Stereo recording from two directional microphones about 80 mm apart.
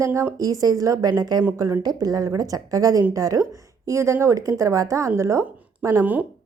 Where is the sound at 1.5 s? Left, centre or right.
Right.